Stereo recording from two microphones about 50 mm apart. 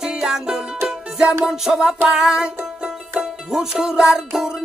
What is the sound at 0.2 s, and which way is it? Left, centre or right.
Music, centre.